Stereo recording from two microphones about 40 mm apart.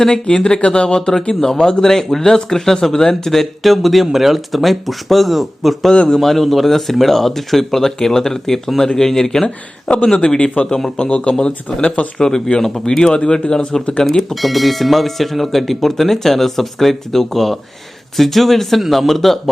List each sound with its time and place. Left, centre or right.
0.1 s speech: left; by 5.9 s centre
5.9 s speech: left
6.1 s speech: centre
10.2 s speech: left
14.1 s speech: centre